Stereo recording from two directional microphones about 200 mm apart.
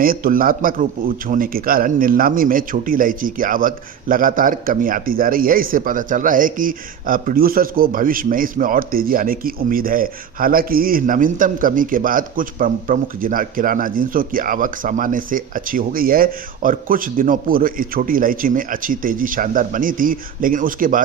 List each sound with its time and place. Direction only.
0.0 s a man's voice: 45° right (ahead or behind)